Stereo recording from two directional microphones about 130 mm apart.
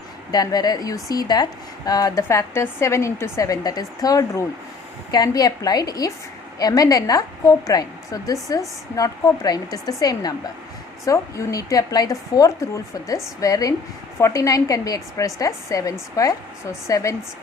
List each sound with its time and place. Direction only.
0.3 s a woman's voice: 30° left (ahead or behind)